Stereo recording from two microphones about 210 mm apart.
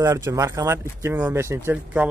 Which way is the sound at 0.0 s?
15° right (ahead or behind).